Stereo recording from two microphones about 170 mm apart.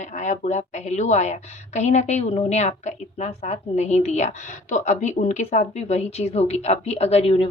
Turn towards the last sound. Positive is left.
turn(degrees=35)  # may be behind; listen again after turning